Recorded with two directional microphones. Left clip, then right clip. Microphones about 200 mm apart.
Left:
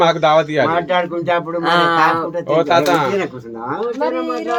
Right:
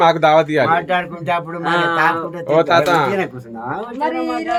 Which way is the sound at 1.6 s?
35° left (ahead or behind).